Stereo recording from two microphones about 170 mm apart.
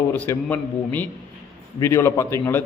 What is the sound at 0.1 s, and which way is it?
Speech, 10° left (ahead or behind).